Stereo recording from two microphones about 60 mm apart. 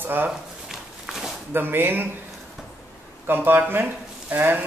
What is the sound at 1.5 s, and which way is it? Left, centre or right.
Speech, right.